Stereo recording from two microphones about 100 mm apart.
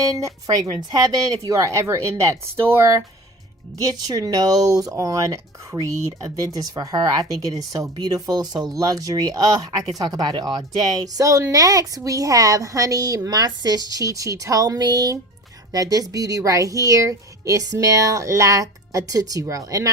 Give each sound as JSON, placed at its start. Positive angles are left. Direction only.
{"t": 0.0, "sound": "a woman's voice", "side_deg": -35}
{"t": 4.0, "sound": "a woman's voice", "side_deg": -40}